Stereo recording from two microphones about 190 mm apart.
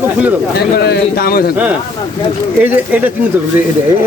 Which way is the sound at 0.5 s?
55° left (ahead or behind).